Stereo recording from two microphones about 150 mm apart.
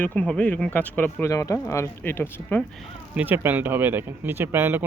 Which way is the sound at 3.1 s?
10° right (ahead or behind).